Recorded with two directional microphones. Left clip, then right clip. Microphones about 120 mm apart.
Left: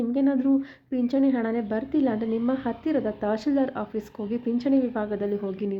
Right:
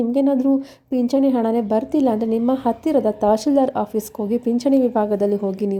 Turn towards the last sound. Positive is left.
turn(degrees=-45)  # may be behind; listen again after turning